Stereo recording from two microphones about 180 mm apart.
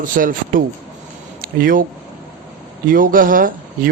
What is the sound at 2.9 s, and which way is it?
Speech, 50° right (ahead or behind).